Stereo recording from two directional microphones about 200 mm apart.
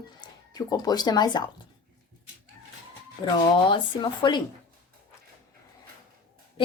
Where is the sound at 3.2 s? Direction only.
25° left (ahead or behind).